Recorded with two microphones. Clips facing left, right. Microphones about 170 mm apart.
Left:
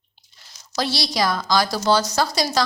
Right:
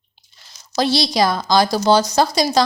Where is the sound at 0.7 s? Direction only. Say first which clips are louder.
Right 6 dB; 25° right (ahead or behind).